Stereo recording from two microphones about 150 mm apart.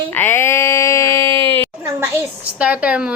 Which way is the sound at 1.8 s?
15° right (ahead or behind).